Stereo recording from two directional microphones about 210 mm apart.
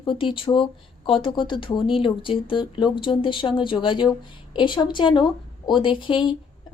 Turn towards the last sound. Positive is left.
turn(degrees=25)  # may be behind; listen again after turning